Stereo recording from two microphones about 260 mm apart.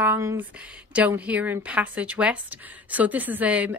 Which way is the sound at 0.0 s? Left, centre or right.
Centre.